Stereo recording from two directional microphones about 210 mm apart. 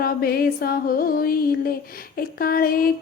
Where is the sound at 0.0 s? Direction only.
45° left (ahead or behind).